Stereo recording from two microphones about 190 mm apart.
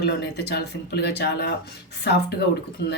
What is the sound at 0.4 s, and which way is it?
Speech, 60° left (ahead or behind).